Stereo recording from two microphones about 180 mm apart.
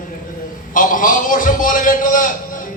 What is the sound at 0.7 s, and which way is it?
A man's voice, 50° left (ahead or behind).